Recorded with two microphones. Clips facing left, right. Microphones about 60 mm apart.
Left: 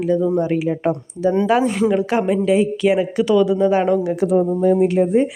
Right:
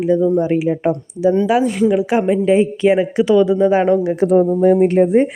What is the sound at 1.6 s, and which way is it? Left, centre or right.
Speech, centre.